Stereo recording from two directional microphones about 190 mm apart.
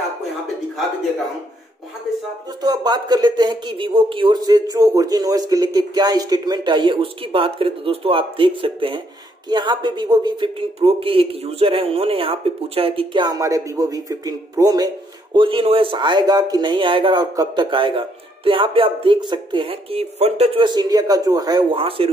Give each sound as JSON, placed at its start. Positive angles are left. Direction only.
{"t": 2.6, "sound": "speech", "side_deg": -20}